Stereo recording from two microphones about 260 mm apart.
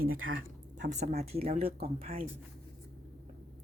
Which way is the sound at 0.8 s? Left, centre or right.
Right.